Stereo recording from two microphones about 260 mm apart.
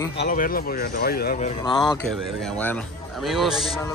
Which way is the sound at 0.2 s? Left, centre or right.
Left.